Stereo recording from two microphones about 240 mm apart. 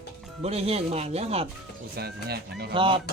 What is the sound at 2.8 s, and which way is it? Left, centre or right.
Speech, right.